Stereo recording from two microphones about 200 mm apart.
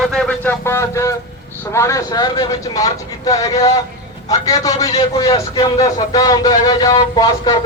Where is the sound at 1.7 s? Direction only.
15° left (ahead or behind).